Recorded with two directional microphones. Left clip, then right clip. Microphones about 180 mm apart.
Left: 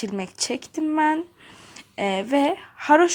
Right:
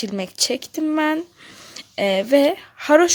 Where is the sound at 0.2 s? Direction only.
30° right (ahead or behind).